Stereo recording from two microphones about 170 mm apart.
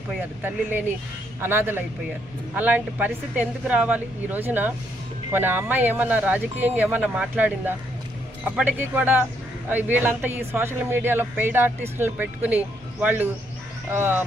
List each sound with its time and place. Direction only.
1.4 s speech: 15° right (ahead or behind)